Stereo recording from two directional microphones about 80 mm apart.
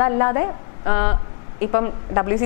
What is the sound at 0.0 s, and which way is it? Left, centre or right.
A woman's voice, left.